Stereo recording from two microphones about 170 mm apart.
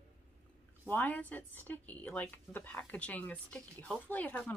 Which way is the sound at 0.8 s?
10° left (ahead or behind).